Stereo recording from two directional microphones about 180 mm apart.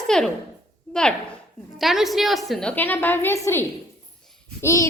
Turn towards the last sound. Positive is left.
turn(degrees=15)  # may be behind; listen again after turning